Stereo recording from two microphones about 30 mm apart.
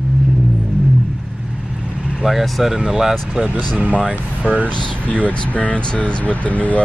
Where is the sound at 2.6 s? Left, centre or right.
Centre.